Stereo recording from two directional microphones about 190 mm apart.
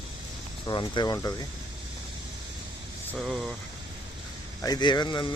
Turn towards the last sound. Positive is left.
turn(degrees=25)  # may be behind; listen again after turning